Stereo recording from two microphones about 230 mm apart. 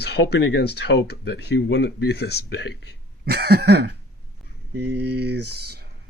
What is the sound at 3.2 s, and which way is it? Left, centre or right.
Cough, right.